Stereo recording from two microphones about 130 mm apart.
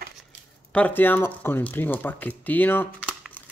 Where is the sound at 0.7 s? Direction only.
10° left (ahead or behind).